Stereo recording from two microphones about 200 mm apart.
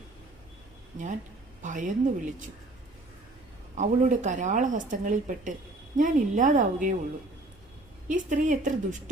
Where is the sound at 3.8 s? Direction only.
40° right (ahead or behind).